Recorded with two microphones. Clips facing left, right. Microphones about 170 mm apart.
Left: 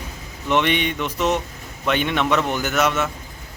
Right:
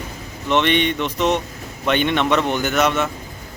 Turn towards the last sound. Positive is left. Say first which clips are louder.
# right 2 dB
turn(degrees=5)  # may be behind; listen again after turning